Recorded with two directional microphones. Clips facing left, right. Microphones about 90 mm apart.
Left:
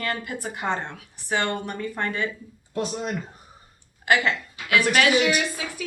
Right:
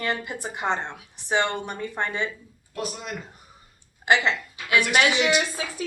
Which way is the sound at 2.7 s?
30° left (ahead or behind).